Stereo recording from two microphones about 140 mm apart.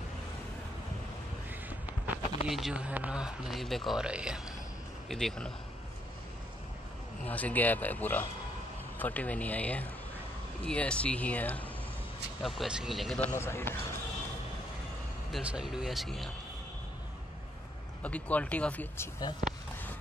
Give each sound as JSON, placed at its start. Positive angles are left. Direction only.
{"t": 2.4, "sound": "speech", "side_deg": -5}
{"t": 7.2, "sound": "speech", "side_deg": 10}
{"t": 12.4, "sound": "speech", "side_deg": 0}
{"t": 13.2, "sound": "speech", "side_deg": 20}
{"t": 15.3, "sound": "speech", "side_deg": -5}
{"t": 18.0, "sound": "speech", "side_deg": 10}